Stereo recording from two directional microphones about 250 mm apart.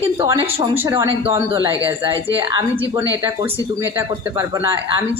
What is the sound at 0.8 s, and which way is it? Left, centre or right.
Speech, centre.